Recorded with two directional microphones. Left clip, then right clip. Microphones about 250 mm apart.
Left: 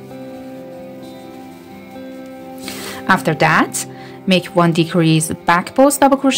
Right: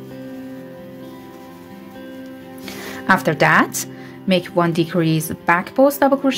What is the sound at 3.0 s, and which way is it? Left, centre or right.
A woman's voice, centre.